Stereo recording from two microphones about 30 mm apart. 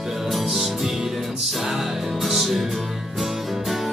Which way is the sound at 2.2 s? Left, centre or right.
Centre.